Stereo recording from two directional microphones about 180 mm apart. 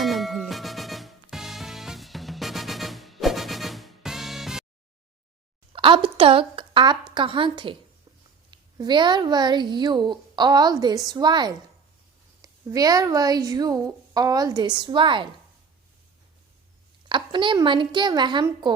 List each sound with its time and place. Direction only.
0.0 s music: centre (ahead or behind)
5.7 s a woman's voice: 30° right (ahead or behind)
17.1 s speech: 25° right (ahead or behind)